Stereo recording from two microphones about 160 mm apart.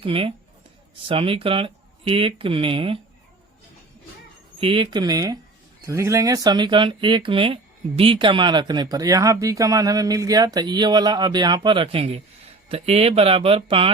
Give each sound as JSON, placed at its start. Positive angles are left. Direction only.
{"t": 0.0, "sound": "speech", "side_deg": -35}
{"t": 4.6, "sound": "speech", "side_deg": -30}